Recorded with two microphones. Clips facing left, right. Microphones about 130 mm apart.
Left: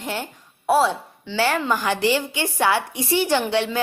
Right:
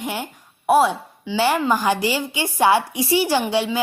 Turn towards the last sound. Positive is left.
turn(degrees=-10)  # may be behind; listen again after turning